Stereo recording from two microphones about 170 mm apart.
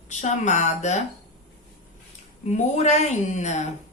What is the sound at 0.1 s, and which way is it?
Speech, 45° left (ahead or behind).